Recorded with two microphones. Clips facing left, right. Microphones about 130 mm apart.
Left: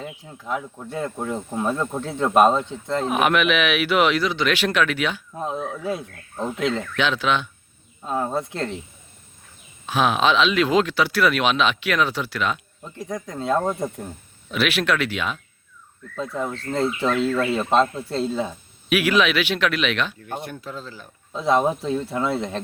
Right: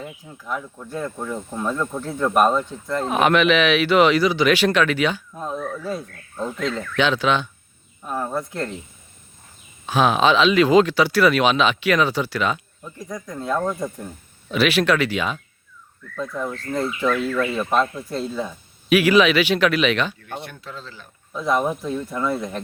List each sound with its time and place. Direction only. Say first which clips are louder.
0.0 s speech: left 1 dB; 20° left (ahead or behind)
3.1 s speech: right 3 dB; 5° left (ahead or behind)
5.3 s speech: even; 20° left (ahead or behind)
6.9 s speech: right 2 dB; centre (ahead or behind)
8.0 s speech: left 1 dB; 20° left (ahead or behind)
9.8 s speech: right 2 dB; centre (ahead or behind)
13.1 s speech: left 3 dB; 55° left (ahead or behind)
13.3 s speech: left 1 dB; 25° left (ahead or behind)
14.5 s speech: right 4 dB; centre (ahead or behind)
16.1 s speech: even; 20° left (ahead or behind)
18.9 s speech: right 4 dB; centre (ahead or behind)
20.7 s speech: left 2 dB; 10° left (ahead or behind)
21.3 s speech: left 2 dB; 25° left (ahead or behind)